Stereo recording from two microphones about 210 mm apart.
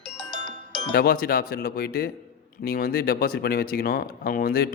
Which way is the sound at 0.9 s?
45° left (ahead or behind).